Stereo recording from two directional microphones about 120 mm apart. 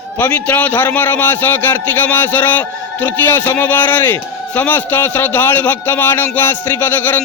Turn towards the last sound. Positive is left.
turn(degrees=15)  # may be behind; listen again after turning